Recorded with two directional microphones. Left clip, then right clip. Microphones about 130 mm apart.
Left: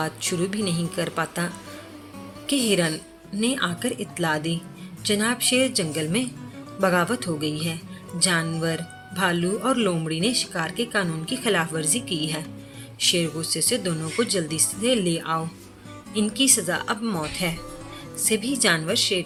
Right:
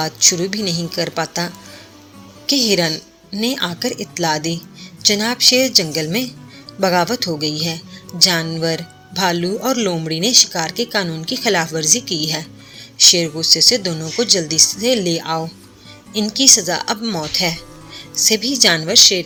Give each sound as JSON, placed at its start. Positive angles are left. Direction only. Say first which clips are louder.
{"t": 0.0, "sound": "a woman's voice", "louder": "right 10 dB", "side_deg": -30}